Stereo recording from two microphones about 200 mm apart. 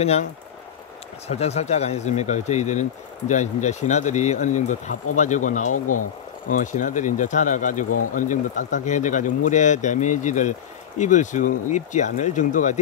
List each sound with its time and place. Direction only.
0.0 s speech: 30° left (ahead or behind)
5.7 s speech: 90° left
6.5 s speech: 40° left (ahead or behind)